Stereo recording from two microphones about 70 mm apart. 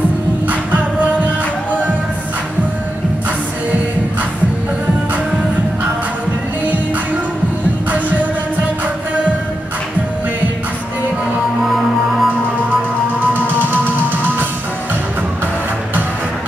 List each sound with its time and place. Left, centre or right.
11.6 s music: centre
13.3 s music: right